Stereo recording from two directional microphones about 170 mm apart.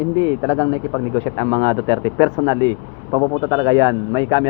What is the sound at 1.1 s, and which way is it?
Speech, 35° right (ahead or behind).